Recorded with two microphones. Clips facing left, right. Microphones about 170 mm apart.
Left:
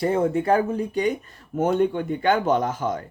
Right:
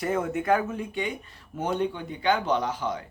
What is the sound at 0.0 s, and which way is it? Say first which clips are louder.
Speech: left 6 dB; 30° left (ahead or behind).